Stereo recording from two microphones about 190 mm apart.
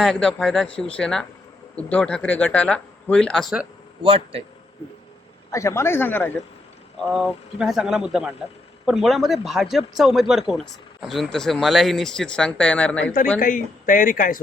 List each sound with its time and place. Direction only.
0.0 s speech: centre (ahead or behind)
4.0 s a man's voice: 30° right (ahead or behind)
5.5 s a man's voice: 15° left (ahead or behind)
13.4 s speech: 45° left (ahead or behind)